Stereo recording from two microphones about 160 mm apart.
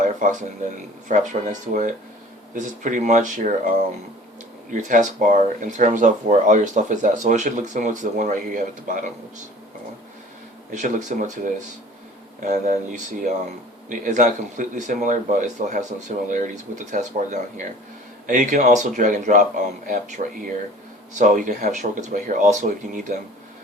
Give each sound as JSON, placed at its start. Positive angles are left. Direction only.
{"t": 0.0, "sound": "speech", "side_deg": -55}
{"t": 4.7, "sound": "speech", "side_deg": -55}
{"t": 10.8, "sound": "speech", "side_deg": -55}
{"t": 14.0, "sound": "speech", "side_deg": -50}